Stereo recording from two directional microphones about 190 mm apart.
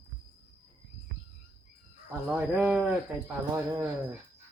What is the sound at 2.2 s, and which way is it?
Speech, 10° right (ahead or behind).